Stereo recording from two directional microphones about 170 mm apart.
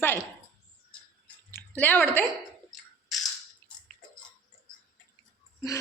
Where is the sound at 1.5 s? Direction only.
10° left (ahead or behind).